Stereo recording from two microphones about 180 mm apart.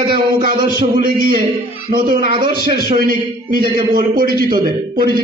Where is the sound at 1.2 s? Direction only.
50° right (ahead or behind).